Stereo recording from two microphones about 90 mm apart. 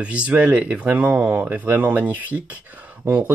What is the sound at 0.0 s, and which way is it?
Speech, 15° right (ahead or behind).